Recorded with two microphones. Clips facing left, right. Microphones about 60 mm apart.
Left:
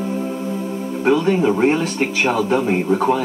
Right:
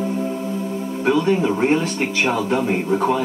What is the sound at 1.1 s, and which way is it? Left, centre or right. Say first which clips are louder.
Speech: left 2 dB; centre.